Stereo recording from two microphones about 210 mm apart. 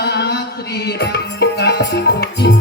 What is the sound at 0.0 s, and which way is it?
Music, 50° left (ahead or behind).